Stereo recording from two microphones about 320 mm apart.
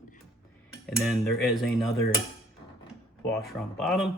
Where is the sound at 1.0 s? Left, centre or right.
Centre.